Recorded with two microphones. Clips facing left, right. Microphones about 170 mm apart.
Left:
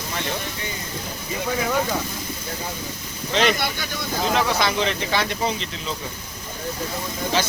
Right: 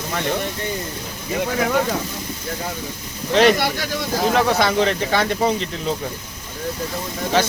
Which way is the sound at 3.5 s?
90° right.